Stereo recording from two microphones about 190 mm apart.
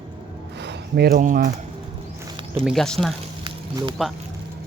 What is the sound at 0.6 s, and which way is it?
Speech, 60° right (ahead or behind).